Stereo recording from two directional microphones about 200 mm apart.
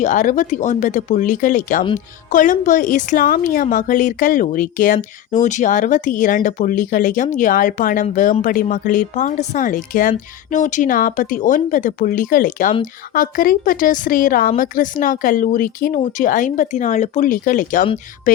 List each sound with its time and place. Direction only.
0.0 s a woman's voice: 40° left (ahead or behind)